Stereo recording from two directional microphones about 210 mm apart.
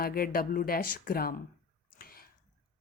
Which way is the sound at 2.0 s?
45° left (ahead or behind).